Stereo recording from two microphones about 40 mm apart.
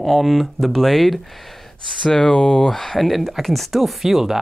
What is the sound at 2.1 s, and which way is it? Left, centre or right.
Speech, centre.